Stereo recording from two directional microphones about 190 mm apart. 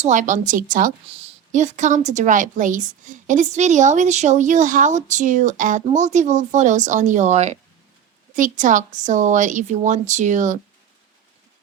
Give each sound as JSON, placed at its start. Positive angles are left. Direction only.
{"t": 0.0, "sound": "a woman's voice", "side_deg": -40}
{"t": 1.1, "sound": "a woman's voice", "side_deg": -35}